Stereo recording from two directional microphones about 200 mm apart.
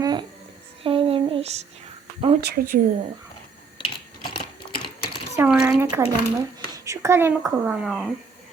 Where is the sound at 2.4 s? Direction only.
50° right (ahead or behind).